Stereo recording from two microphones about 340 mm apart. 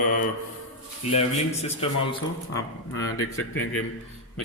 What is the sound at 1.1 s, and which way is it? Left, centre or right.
Speech, centre.